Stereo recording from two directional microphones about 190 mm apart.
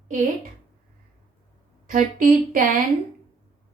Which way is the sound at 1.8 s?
45° right (ahead or behind).